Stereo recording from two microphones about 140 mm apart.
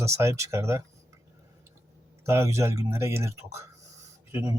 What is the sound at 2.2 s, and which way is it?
Speech, 20° right (ahead or behind).